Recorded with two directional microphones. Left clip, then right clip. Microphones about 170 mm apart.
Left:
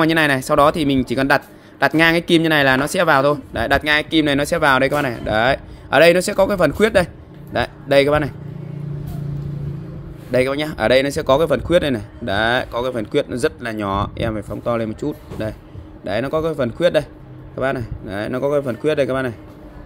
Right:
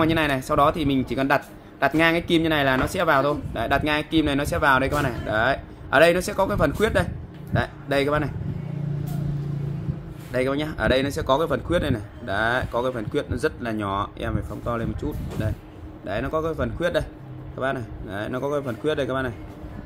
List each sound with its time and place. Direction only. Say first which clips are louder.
0.0 s a man's voice: left 6 dB; 50° left (ahead or behind)
10.3 s a man's voice: left 6 dB; 45° left (ahead or behind)